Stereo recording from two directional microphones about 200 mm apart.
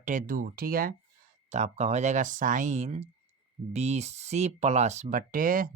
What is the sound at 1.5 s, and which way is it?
Speech, 35° right (ahead or behind).